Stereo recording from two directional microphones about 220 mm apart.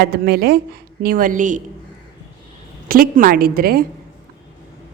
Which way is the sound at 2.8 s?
40° right (ahead or behind).